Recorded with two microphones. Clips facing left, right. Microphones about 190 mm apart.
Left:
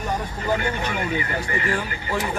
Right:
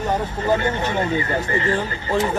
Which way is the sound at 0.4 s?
25° right (ahead or behind).